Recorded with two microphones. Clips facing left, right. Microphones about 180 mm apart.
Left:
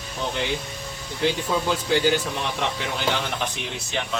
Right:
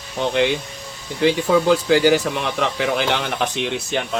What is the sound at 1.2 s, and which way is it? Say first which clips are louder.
Speech: right 7 dB; 90° right.